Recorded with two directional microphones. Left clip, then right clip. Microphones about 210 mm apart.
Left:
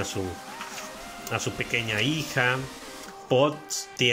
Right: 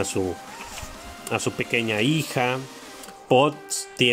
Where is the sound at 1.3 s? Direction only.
20° right (ahead or behind).